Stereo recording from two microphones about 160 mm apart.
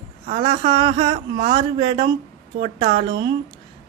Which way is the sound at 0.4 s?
30° right (ahead or behind).